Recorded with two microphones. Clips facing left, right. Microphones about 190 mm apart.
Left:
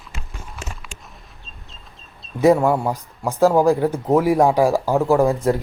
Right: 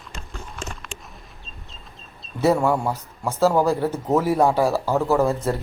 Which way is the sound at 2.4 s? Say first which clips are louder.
Left 4 dB; 15° left (ahead or behind).